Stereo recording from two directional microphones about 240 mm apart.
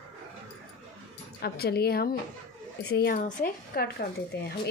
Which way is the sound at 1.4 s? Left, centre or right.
Left.